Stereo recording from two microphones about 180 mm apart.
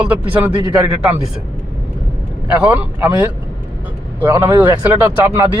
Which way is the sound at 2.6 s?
10° right (ahead or behind).